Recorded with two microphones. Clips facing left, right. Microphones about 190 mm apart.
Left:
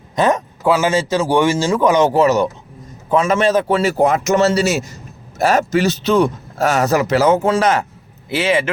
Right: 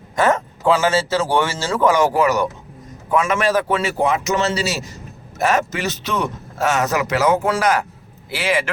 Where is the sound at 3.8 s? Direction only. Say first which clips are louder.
Left 4 dB; 40° left (ahead or behind).